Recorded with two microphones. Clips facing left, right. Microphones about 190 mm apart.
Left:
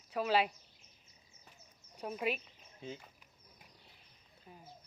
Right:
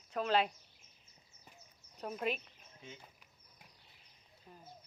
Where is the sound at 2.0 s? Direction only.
5° left (ahead or behind).